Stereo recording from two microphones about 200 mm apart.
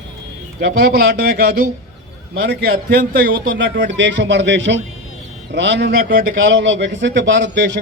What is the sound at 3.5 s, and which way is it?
A man's voice, 60° right (ahead or behind).